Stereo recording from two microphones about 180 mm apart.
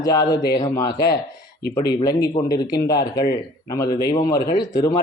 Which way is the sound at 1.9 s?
25° left (ahead or behind).